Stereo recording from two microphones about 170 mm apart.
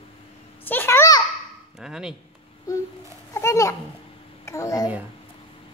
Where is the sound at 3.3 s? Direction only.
15° left (ahead or behind).